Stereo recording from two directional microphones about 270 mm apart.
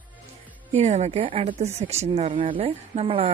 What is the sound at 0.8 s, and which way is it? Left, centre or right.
Speech, right.